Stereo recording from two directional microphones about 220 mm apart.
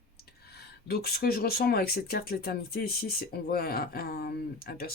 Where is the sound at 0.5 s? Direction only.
45° left (ahead or behind).